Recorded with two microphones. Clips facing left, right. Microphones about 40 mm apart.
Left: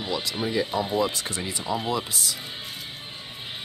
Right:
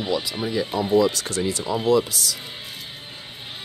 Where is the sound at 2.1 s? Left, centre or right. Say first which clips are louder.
Right 2 dB; left.